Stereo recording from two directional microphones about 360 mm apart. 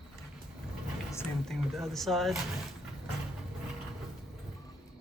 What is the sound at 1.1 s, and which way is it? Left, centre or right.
Speech, centre.